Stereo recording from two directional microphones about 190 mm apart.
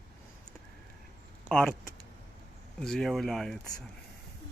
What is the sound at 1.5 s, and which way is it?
Speech, 5° left (ahead or behind).